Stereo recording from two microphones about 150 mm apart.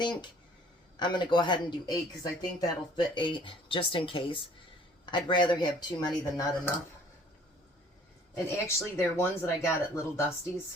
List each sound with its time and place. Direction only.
0.0 s speech: 30° left (ahead or behind)
8.4 s speech: 15° left (ahead or behind)